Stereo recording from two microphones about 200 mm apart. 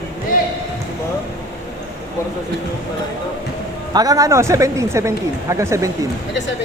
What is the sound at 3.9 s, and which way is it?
Speech, 15° right (ahead or behind).